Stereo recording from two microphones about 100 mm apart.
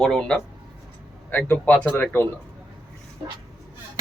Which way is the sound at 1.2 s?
15° left (ahead or behind).